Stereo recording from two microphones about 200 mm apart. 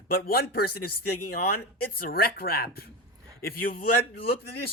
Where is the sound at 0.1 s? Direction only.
50° left (ahead or behind).